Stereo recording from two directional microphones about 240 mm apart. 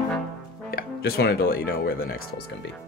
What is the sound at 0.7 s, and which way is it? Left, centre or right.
Speech, left.